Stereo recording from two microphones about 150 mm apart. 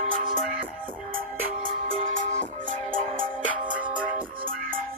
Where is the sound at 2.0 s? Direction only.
55° right (ahead or behind).